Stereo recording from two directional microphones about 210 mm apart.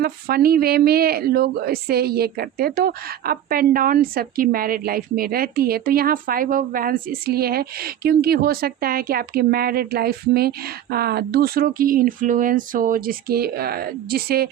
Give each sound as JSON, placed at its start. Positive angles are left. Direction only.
{"t": 0.0, "sound": "speech", "side_deg": -45}